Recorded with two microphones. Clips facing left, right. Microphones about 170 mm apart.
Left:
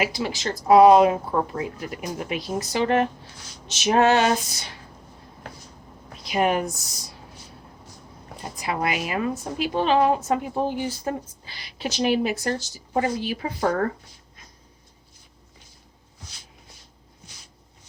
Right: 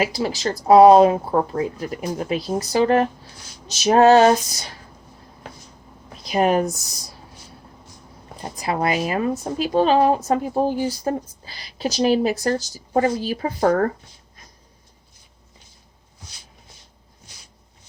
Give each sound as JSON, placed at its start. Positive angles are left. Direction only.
{"t": 0.0, "sound": "a woman's voice", "side_deg": -35}
{"t": 6.2, "sound": "speech", "side_deg": -35}
{"t": 8.5, "sound": "a woman's voice", "side_deg": -35}